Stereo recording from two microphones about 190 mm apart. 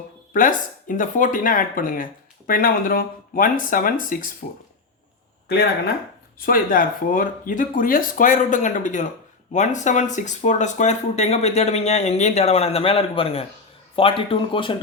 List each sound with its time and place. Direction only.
0.3 s speech: 45° left (ahead or behind)
6.4 s speech: 50° left (ahead or behind); by 14.8 s 25° left (ahead or behind)